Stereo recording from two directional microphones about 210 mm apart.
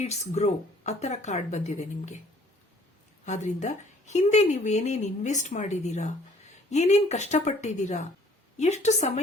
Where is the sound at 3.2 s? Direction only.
35° left (ahead or behind).